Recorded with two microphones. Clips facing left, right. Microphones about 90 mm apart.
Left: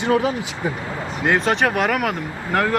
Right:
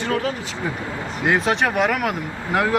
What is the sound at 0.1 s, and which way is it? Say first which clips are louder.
Speech: left 5 dB; 15° left (ahead or behind).